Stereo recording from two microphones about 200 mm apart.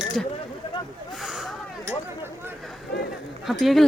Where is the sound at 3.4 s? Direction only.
Centre (ahead or behind).